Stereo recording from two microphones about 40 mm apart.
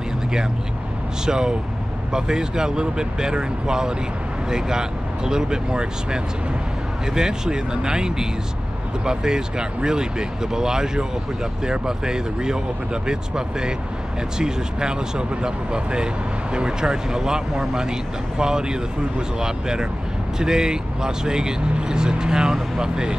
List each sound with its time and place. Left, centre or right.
1.2 s speech: centre